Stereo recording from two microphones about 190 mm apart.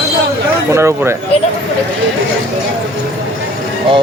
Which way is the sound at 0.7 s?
15° right (ahead or behind).